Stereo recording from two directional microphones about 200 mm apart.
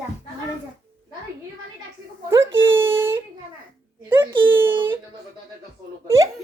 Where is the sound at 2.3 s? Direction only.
10° right (ahead or behind).